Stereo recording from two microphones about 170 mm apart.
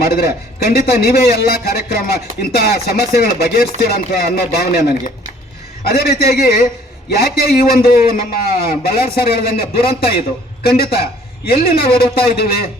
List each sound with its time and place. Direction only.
0.0 s a man's voice: 65° left (ahead or behind)